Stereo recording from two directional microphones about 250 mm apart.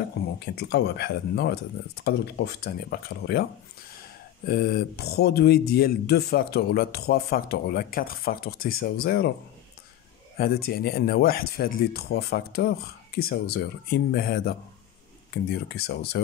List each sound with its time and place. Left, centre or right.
0.6 s speech: left
4.5 s speech: left
10.3 s speech: left